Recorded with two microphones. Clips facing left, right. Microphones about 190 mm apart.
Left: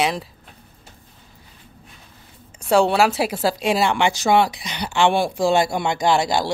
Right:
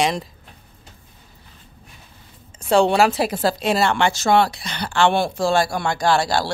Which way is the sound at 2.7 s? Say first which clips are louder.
Right 1 dB; 5° left (ahead or behind).